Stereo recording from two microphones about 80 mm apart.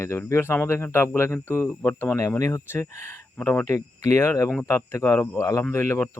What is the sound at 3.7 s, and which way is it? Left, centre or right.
Speech, left.